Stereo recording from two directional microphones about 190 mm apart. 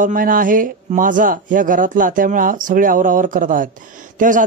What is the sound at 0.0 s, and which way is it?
A man's voice, 45° right (ahead or behind).